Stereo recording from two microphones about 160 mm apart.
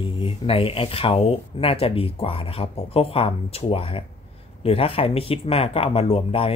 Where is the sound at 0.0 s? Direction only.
35° left (ahead or behind).